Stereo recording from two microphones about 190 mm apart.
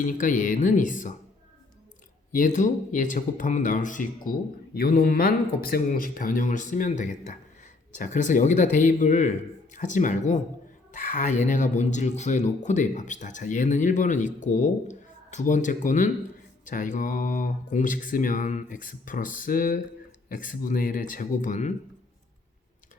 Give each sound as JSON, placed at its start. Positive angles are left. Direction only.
{"t": 0.0, "sound": "speech", "side_deg": 45}
{"t": 2.3, "sound": "speech", "side_deg": 40}